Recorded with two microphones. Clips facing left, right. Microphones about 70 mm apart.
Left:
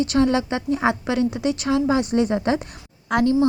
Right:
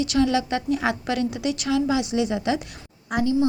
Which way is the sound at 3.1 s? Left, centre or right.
Left.